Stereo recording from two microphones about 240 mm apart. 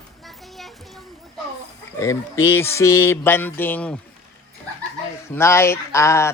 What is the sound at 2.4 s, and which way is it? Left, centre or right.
Fowl, centre.